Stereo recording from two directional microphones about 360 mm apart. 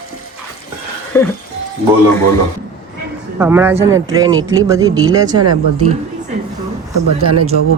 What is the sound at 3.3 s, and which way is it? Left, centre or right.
Speech, centre.